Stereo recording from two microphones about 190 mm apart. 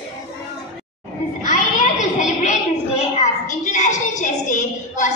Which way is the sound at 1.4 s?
40° left (ahead or behind).